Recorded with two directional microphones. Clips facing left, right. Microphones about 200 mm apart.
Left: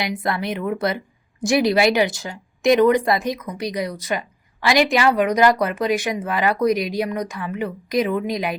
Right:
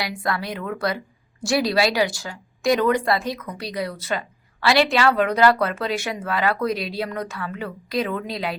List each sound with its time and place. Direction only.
0.0 s speech: 20° left (ahead or behind)